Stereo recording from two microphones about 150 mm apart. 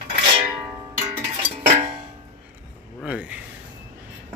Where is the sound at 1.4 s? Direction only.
40° right (ahead or behind).